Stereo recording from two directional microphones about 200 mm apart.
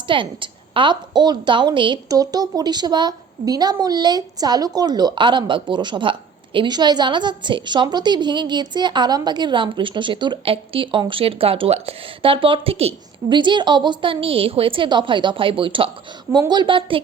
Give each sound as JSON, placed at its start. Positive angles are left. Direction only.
{"t": 0.1, "sound": "a woman's voice", "side_deg": -25}